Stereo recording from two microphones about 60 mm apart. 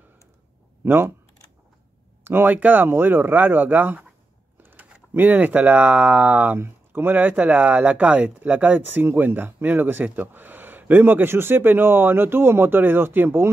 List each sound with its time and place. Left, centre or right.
0.8 s speech: right
2.2 s speech: right
5.1 s speech: right
6.6 s speech: right